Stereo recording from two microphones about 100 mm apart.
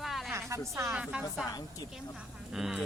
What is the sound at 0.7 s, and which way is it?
Speech, 30° right (ahead or behind).